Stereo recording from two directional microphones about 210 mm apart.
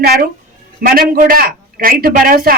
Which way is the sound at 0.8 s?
45° right (ahead or behind).